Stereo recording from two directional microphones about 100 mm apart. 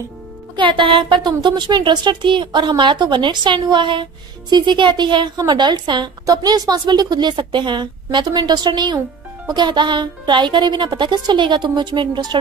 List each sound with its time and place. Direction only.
0.6 s a woman's voice: 55° right (ahead or behind)